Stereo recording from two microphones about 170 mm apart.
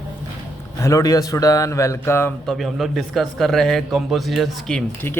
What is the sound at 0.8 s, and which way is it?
Speech, 20° left (ahead or behind).